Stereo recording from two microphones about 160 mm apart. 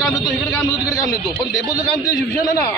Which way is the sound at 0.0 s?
10° left (ahead or behind).